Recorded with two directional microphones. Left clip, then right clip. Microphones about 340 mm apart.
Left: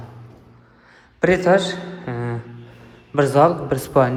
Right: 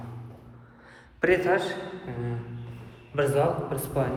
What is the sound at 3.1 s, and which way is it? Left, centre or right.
Speech, centre.